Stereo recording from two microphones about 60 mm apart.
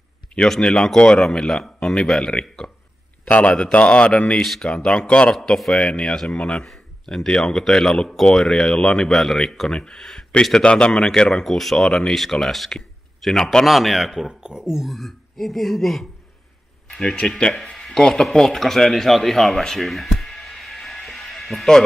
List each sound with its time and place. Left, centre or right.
0.5 s speech: centre
4.4 s speech: centre
4.6 s speech: centre
13.7 s speech: centre
14.9 s a man's voice: centre